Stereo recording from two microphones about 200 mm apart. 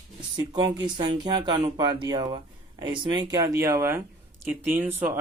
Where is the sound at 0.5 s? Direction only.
20° right (ahead or behind).